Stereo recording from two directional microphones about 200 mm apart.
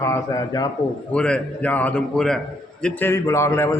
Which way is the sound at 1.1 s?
5° left (ahead or behind).